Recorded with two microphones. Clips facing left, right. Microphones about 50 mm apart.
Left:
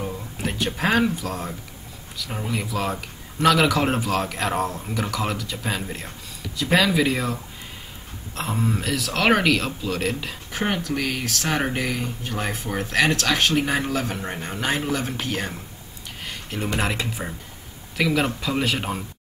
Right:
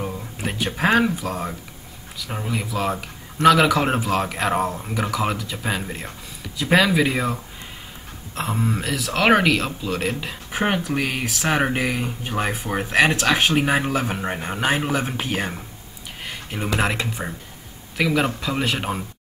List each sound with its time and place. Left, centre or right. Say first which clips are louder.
0.0 s speech: right 1 dB; centre
8.4 s speech: right 1 dB; centre
10.5 s speech: right 3 dB; centre
16.2 s a sound: right 1 dB; centre
16.8 s speech: right 2 dB; centre